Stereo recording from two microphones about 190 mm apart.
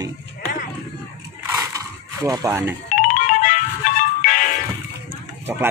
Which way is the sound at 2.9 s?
45° left (ahead or behind).